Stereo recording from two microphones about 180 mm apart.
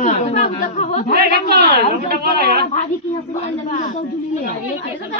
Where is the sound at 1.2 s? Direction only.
60° right (ahead or behind).